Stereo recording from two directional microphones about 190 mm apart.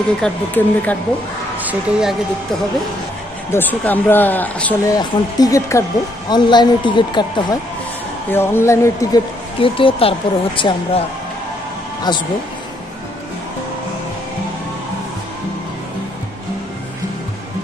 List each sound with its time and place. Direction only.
0.2 s speech: 10° left (ahead or behind)
1.6 s speech: 5° right (ahead or behind)
3.5 s speech: 10° left (ahead or behind)
8.3 s speech: 10° left (ahead or behind)
9.6 s speech: 30° left (ahead or behind)
12.1 s speech: 25° left (ahead or behind)